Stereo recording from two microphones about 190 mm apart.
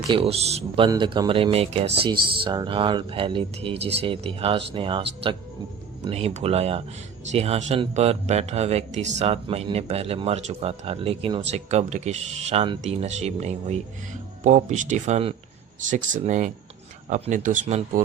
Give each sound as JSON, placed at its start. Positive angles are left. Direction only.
{"t": 0.1, "sound": "speech", "side_deg": -30}